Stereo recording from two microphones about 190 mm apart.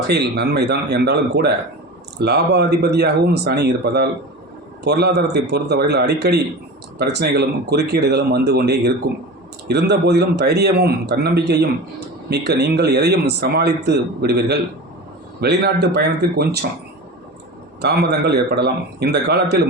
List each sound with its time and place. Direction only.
0.1 s a man's voice: 60° right (ahead or behind)
17.7 s a man's voice: 60° right (ahead or behind)